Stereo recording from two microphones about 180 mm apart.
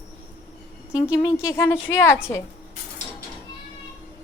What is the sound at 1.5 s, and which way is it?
Speech, 15° left (ahead or behind).